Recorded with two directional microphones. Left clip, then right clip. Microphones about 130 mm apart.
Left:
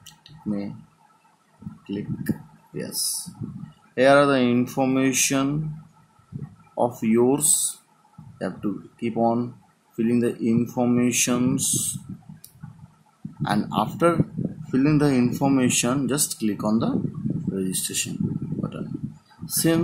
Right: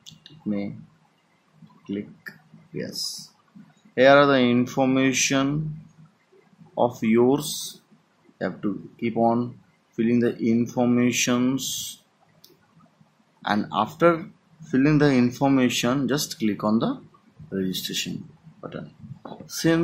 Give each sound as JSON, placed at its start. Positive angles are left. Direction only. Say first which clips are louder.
{"t": 0.0, "sound": "clicking", "louder": "right 1 dB", "side_deg": 15}
{"t": 1.9, "sound": "speech", "louder": "left 3 dB", "side_deg": 20}
{"t": 6.7, "sound": "speech", "louder": "right 1 dB", "side_deg": 15}
{"t": 13.4, "sound": "speech", "louder": "even", "side_deg": 20}
{"t": 19.5, "sound": "speech", "louder": "even", "side_deg": 20}